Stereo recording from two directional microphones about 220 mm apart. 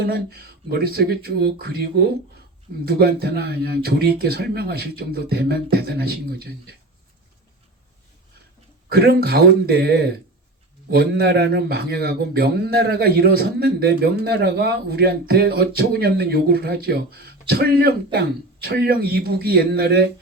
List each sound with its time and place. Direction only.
0.0 s speech: 45° right (ahead or behind)
8.9 s speech: 45° right (ahead or behind)